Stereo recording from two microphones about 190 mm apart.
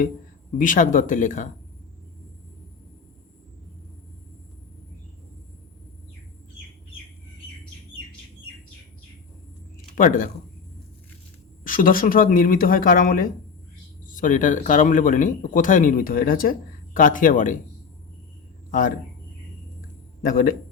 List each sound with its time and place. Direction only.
0.6 s speech: 45° left (ahead or behind)
9.9 s speech: 45° left (ahead or behind)
11.6 s speech: 45° left (ahead or behind)
18.7 s speech: 50° left (ahead or behind)
20.2 s speech: 45° left (ahead or behind)